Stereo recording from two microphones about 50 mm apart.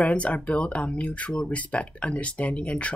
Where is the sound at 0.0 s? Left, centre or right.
Left.